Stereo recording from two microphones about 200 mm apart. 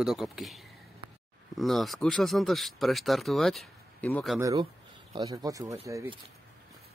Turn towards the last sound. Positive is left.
turn(degrees=-15)  # may be behind; listen again after turning